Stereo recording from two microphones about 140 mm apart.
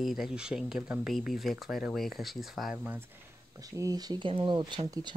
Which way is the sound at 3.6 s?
25° right (ahead or behind).